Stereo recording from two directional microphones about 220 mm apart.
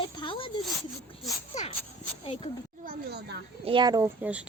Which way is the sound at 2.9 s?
50° right (ahead or behind).